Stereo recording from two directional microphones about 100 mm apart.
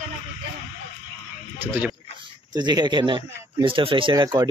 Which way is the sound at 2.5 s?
45° right (ahead or behind).